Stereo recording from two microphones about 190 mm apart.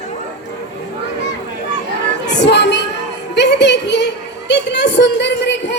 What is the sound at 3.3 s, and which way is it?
Music, 65° left (ahead or behind).